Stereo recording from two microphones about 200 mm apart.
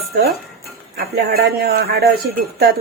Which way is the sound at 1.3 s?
50° right (ahead or behind).